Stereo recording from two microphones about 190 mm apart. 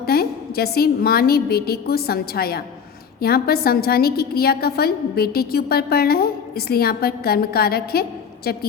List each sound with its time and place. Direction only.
0.0 s a woman's voice: 55° left (ahead or behind)